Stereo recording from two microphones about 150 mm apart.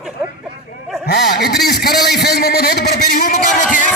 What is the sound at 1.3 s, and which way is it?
A man's voice, 90° left.